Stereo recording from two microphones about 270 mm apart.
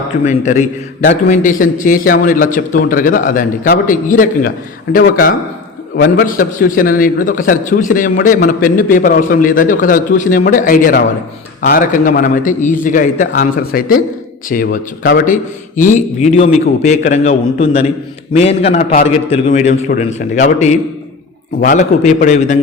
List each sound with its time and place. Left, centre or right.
0.3 s a man's voice: left